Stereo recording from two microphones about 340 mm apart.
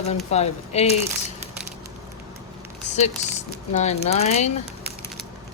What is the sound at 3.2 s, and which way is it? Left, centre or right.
Speech, centre.